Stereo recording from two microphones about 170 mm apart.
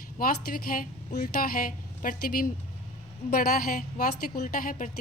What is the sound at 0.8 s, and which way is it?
A woman's voice, 55° left (ahead or behind).